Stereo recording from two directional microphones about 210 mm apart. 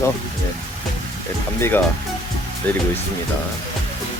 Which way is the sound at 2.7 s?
5° left (ahead or behind).